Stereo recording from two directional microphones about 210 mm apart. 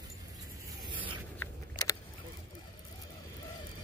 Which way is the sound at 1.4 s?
15° left (ahead or behind).